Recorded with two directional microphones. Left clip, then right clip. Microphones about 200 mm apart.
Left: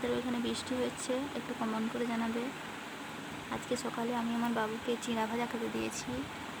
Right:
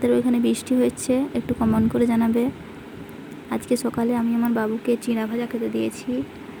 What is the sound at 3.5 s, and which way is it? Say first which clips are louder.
Speech: right 13 dB; 25° right (ahead or behind).